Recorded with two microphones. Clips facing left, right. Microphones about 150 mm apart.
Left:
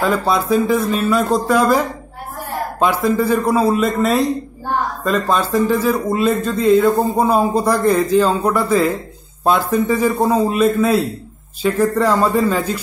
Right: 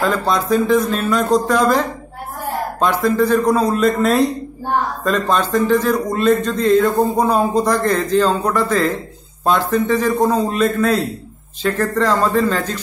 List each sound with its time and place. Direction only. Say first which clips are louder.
0.0 s a man's voice: left 1 dB; 5° left (ahead or behind)